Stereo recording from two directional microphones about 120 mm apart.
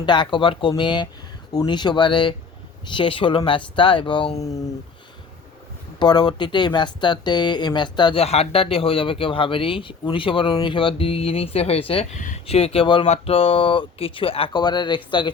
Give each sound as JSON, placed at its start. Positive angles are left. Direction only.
{"t": 0.0, "sound": "speech", "side_deg": 40}
{"t": 4.4, "sound": "speech", "side_deg": 30}
{"t": 6.0, "sound": "speech", "side_deg": 35}
{"t": 8.2, "sound": "speech", "side_deg": 60}
{"t": 12.1, "sound": "speech", "side_deg": 90}
{"t": 12.5, "sound": "speech", "side_deg": 55}